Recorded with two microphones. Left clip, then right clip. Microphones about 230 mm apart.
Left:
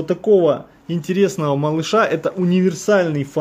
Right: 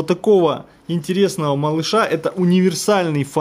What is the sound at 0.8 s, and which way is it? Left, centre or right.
Speech, centre.